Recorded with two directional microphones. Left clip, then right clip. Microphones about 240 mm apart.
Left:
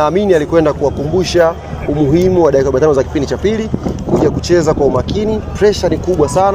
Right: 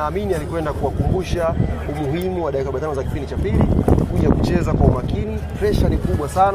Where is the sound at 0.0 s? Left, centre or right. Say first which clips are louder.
Left 11 dB; left.